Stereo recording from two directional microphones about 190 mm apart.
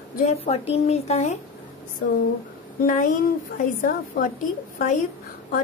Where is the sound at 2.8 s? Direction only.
45° left (ahead or behind).